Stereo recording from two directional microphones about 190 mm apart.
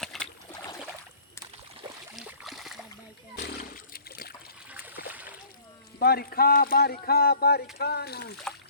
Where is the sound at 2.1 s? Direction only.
5° right (ahead or behind).